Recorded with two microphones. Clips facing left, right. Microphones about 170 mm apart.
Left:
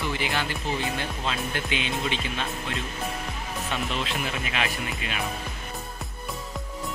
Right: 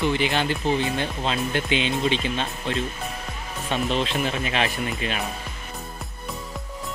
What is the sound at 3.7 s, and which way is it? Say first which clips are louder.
Speech: right 7 dB; 25° right (ahead or behind).